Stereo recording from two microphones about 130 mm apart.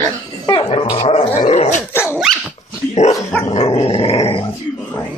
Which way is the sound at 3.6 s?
45° left (ahead or behind).